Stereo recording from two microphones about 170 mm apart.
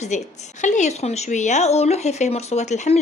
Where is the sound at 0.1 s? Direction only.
45° left (ahead or behind).